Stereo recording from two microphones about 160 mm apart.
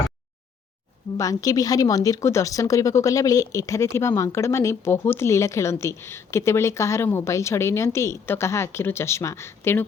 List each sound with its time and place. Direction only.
1.1 s speech: 20° left (ahead or behind)